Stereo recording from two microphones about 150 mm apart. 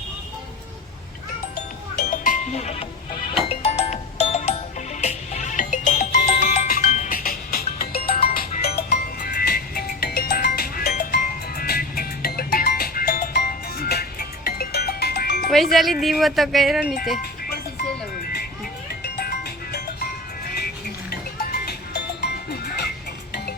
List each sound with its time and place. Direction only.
1.5 s music: 60° left (ahead or behind); by 15.4 s 90° left
15.4 s speech: centre (ahead or behind)
21.7 s music: 90° left